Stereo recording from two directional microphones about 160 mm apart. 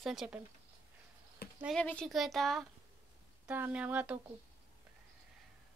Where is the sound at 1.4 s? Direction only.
75° left (ahead or behind).